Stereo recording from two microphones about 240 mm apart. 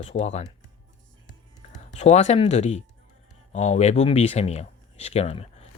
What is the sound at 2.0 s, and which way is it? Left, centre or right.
Speech, left.